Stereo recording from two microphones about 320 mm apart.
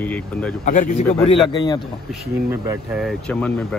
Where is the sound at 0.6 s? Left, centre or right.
Left.